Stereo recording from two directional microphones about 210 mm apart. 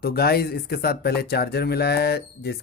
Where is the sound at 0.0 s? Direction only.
50° left (ahead or behind).